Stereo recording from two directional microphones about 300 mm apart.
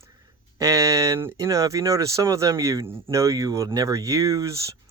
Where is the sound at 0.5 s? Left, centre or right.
Centre.